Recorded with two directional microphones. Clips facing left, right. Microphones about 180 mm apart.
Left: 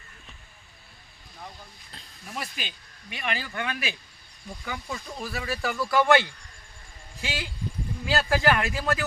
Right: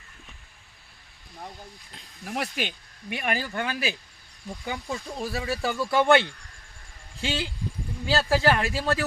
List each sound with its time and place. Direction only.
2.2 s speech: 70° right (ahead or behind); by 9.0 s 30° right (ahead or behind)